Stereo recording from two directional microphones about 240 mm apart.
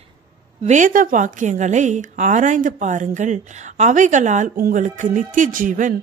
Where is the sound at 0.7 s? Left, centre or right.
Right.